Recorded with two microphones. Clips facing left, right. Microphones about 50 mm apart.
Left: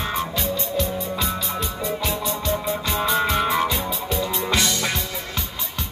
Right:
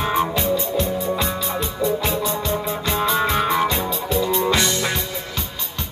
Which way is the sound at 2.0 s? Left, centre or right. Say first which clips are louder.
Right 3 dB; right.